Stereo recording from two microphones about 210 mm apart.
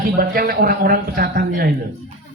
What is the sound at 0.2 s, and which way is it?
Speech, 45° right (ahead or behind).